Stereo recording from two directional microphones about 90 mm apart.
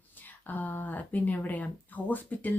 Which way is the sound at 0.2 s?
20° left (ahead or behind).